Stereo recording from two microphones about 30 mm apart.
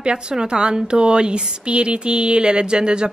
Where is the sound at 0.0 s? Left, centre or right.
Right.